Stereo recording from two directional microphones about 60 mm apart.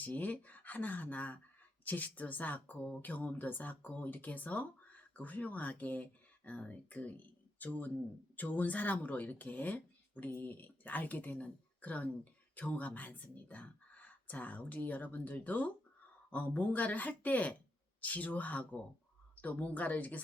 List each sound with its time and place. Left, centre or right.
0.0 s speech: left